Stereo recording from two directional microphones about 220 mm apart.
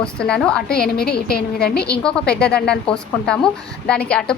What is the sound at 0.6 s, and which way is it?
Speech, 45° left (ahead or behind).